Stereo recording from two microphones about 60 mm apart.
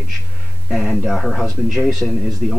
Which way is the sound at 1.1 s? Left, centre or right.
Centre.